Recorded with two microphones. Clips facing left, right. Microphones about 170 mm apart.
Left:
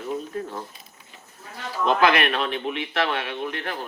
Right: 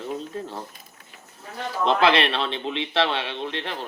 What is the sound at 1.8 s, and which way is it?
Speech, 30° right (ahead or behind).